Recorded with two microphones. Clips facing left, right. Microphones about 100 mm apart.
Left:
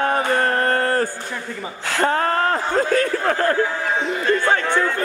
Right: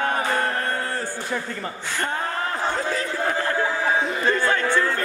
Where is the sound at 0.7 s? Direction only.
60° left (ahead or behind).